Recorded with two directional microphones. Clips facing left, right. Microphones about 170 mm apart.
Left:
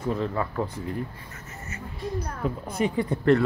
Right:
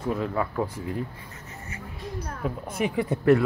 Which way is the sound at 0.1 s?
5° right (ahead or behind).